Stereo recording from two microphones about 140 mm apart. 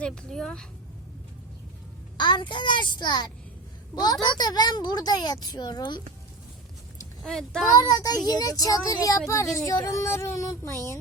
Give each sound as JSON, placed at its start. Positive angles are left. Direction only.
{"t": 0.0, "sound": "speech", "side_deg": 5}
{"t": 2.1, "sound": "a child's voice", "side_deg": 35}
{"t": 7.2, "sound": "speech", "side_deg": 5}
{"t": 7.8, "sound": "a child's voice", "side_deg": 25}